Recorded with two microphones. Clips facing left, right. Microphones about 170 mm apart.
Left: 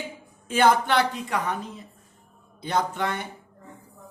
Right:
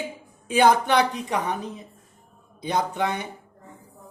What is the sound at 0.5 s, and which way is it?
A woman's voice, 15° right (ahead or behind).